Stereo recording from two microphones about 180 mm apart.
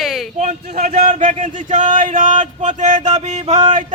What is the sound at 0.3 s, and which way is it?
Speech, 40° right (ahead or behind).